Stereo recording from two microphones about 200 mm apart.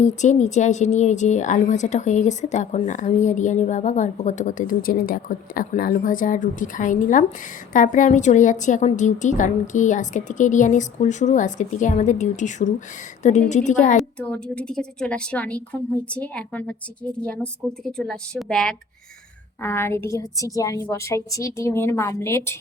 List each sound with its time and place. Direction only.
0.0 s a woman's voice: 35° left (ahead or behind)
13.9 s a woman's voice: 5° left (ahead or behind)